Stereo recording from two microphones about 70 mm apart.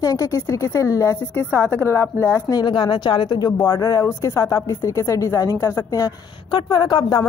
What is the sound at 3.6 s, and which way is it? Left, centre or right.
A woman's voice, left.